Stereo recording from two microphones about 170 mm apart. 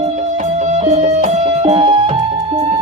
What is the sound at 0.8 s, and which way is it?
Music, 40° right (ahead or behind).